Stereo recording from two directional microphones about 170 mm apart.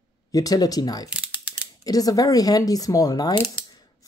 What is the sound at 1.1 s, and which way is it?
Mechanisms, 10° right (ahead or behind).